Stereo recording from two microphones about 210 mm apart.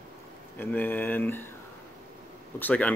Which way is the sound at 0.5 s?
10° left (ahead or behind).